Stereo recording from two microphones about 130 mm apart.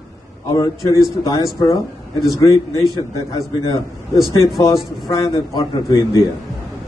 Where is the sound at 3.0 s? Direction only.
25° left (ahead or behind).